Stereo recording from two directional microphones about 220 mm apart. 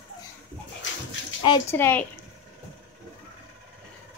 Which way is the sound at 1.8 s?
10° left (ahead or behind).